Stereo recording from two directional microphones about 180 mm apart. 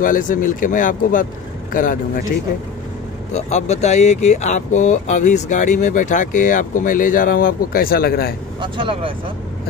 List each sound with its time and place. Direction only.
0.0 s speech: 50° left (ahead or behind)
3.3 s speech: 40° left (ahead or behind); by 8.4 s 60° left (ahead or behind)
8.5 s speech: 30° right (ahead or behind)